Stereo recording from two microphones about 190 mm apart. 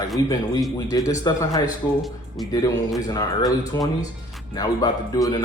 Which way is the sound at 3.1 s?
20° left (ahead or behind).